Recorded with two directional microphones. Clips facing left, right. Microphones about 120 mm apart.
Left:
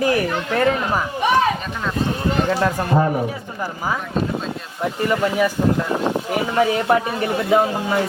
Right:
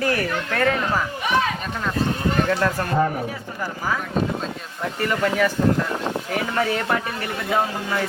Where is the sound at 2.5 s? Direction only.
20° left (ahead or behind).